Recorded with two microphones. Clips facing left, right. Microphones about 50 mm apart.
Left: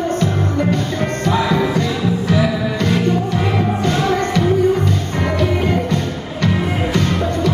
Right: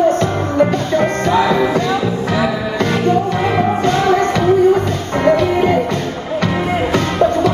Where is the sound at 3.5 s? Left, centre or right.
Right.